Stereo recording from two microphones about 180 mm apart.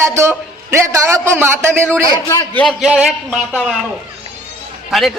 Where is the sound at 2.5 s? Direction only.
Centre (ahead or behind).